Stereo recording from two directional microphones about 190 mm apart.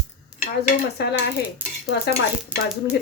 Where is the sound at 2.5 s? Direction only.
10° right (ahead or behind).